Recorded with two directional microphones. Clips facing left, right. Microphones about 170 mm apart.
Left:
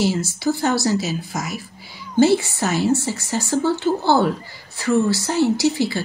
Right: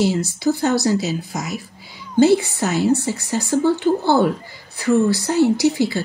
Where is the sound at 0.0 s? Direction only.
20° right (ahead or behind).